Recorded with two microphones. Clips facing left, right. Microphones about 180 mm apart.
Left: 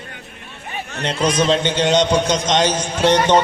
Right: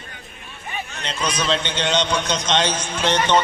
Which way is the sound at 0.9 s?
60° left (ahead or behind).